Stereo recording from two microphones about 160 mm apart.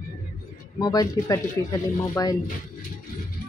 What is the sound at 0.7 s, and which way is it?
Speech, 25° left (ahead or behind).